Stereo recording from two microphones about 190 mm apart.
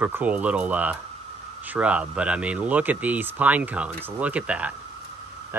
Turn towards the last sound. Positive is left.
turn(degrees=-5)  # may be behind; listen again after turning